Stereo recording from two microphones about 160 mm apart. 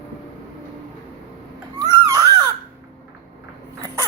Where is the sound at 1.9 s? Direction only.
25° right (ahead or behind).